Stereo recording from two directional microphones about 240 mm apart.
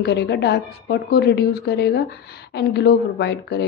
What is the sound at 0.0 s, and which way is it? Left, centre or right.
A woman's voice, left.